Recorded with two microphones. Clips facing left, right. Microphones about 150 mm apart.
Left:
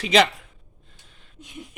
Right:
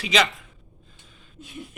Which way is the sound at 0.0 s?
50° left (ahead or behind).